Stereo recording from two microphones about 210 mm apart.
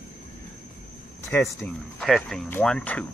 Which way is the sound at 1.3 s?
10° left (ahead or behind).